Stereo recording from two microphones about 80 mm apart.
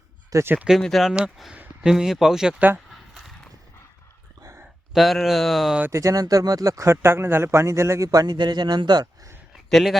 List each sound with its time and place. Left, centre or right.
0.4 s speech: centre
0.8 s speech: centre
1.5 s speech: centre
2.6 s speech: centre
2.9 s a sound: centre
4.9 s speech: centre
5.9 s speech: right
9.6 s speech: centre